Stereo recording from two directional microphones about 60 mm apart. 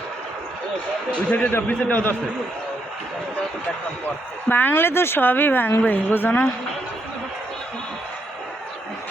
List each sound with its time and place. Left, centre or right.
1.3 s a man's voice: left
4.4 s speech: left